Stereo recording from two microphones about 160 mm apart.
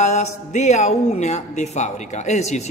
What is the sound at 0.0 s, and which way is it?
Speech, 45° left (ahead or behind).